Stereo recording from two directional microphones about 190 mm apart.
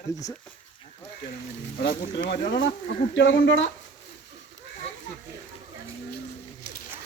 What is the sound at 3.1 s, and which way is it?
Speech, 75° left (ahead or behind).